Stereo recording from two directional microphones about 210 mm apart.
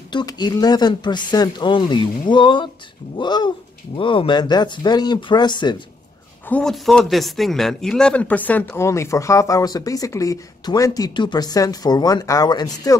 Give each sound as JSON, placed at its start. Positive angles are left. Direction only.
{"t": 0.1, "sound": "speech", "side_deg": 20}
{"t": 6.5, "sound": "a man's voice", "side_deg": 0}